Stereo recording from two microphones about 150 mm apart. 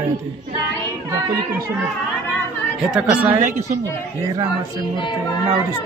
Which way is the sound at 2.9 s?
10° right (ahead or behind).